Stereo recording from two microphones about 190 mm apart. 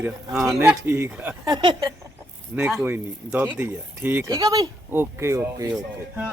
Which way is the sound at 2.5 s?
10° right (ahead or behind).